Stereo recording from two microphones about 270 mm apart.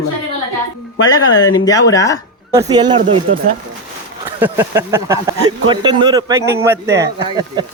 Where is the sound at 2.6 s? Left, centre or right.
Centre.